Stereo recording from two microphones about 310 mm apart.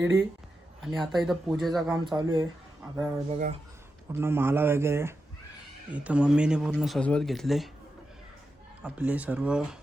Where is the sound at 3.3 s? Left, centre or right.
Right.